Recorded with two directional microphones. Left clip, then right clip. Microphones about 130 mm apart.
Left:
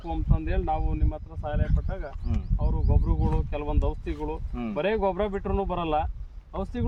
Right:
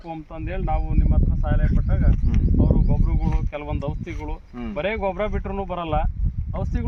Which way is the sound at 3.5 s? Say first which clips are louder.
Right 1 dB; 15° right (ahead or behind).